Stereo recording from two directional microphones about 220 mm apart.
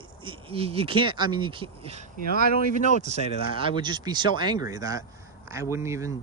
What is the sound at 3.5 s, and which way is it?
Speech, 20° right (ahead or behind).